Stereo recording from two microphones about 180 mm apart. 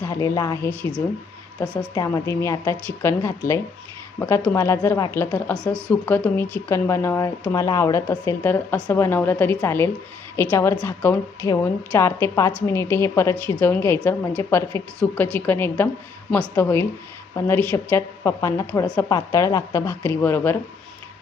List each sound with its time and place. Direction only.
0.0 s a woman's voice: 15° left (ahead or behind)
0.8 s a woman's voice: 5° left (ahead or behind)